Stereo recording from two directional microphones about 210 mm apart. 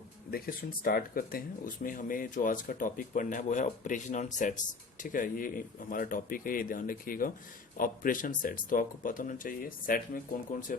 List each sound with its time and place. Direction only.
0.3 s speech: 45° left (ahead or behind)